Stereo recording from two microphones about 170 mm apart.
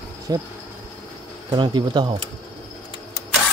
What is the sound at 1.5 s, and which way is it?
Speech, 25° right (ahead or behind).